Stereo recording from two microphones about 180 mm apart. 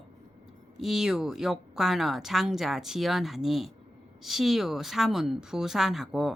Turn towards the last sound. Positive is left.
turn(degrees=0)  # may be behind; listen again after turning